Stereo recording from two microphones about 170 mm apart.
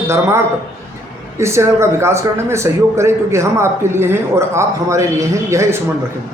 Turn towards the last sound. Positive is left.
turn(degrees=-15)  # may be behind; listen again after turning